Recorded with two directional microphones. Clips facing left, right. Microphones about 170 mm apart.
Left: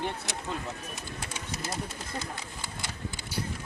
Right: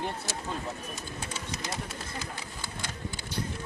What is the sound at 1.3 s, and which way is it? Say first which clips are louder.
Bird: left 1 dB; 5° left (ahead or behind).